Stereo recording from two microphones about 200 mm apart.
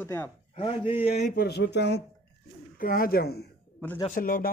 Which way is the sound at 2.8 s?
45° left (ahead or behind).